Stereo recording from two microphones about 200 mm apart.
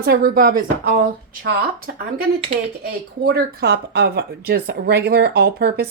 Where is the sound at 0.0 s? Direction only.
50° right (ahead or behind).